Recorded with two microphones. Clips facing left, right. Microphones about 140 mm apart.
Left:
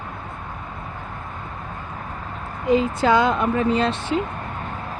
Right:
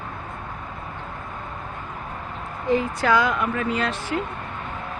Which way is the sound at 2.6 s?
20° left (ahead or behind).